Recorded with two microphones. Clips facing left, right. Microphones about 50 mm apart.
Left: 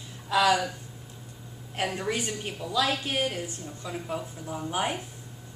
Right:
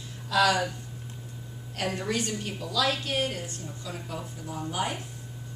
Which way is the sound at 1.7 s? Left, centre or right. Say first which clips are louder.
Even; left.